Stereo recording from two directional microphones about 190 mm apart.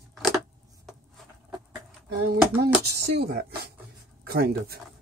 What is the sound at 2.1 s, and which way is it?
Speech, 55° right (ahead or behind).